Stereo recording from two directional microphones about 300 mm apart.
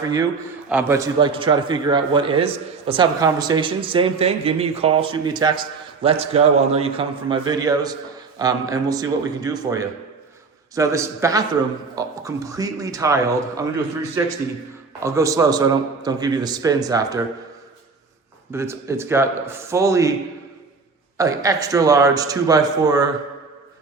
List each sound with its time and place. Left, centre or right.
0.7 s a man's voice: centre
18.5 s a man's voice: centre
21.2 s a man's voice: centre